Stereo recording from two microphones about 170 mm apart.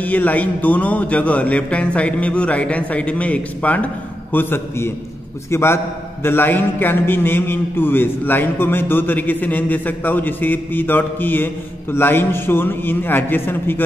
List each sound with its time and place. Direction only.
0.0 s a man's voice: 10° left (ahead or behind)